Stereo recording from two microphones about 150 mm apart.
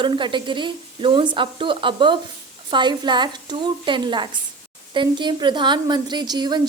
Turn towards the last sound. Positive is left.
turn(degrees=-30)  # may be behind; listen again after turning